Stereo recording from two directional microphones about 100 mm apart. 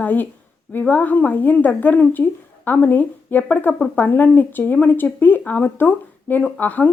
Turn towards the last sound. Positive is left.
turn(degrees=15)  # may be behind; listen again after turning